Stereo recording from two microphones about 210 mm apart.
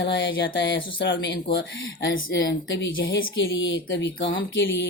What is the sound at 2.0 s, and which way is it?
A woman's voice, 65° left (ahead or behind).